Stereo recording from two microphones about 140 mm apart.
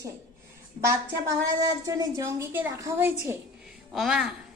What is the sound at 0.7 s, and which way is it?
A woman's voice, 20° right (ahead or behind).